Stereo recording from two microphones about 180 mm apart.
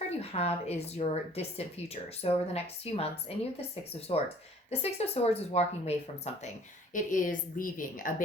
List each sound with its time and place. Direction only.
0.2 s speech: 35° left (ahead or behind)
6.9 s a woman's voice: 45° left (ahead or behind)